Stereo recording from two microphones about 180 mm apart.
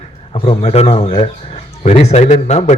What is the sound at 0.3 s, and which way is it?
A man's voice, 30° left (ahead or behind).